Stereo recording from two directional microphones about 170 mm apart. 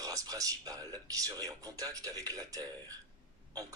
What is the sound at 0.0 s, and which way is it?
Speech, 20° right (ahead or behind).